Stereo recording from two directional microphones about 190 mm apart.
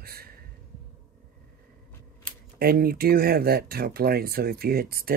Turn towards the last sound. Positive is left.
turn(degrees=-55)  # may be behind; listen again after turning